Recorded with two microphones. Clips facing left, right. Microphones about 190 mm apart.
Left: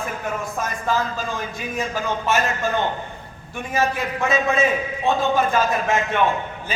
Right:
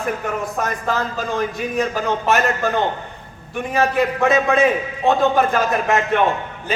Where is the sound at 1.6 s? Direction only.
65° right (ahead or behind).